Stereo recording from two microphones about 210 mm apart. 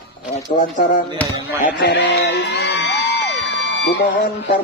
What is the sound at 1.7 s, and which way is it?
Music, 55° left (ahead or behind).